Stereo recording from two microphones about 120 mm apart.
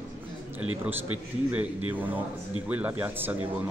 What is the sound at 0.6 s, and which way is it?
Speech, 15° right (ahead or behind).